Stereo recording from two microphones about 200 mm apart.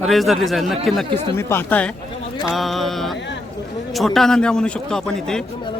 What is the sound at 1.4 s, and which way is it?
A man's voice, 10° left (ahead or behind).